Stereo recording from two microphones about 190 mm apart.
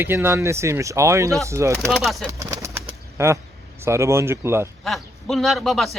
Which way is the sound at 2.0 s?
Centre (ahead or behind).